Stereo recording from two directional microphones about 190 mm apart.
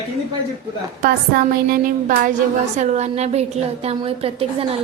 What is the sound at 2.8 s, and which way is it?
A woman's voice, 40° right (ahead or behind).